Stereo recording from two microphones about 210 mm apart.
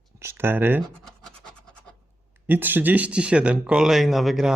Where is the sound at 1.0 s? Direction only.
Centre (ahead or behind).